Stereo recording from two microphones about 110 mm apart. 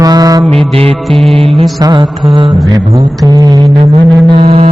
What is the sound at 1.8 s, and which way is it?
Music, 40° right (ahead or behind).